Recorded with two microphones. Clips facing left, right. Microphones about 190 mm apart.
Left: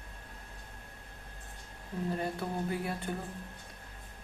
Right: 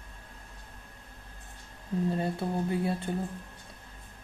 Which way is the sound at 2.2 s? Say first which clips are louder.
Right 4 dB; 25° right (ahead or behind).